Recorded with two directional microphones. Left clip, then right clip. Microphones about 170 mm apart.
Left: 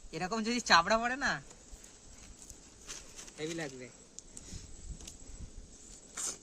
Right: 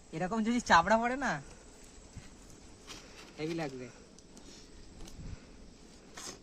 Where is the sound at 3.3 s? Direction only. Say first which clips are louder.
Right 2 dB; centre (ahead or behind).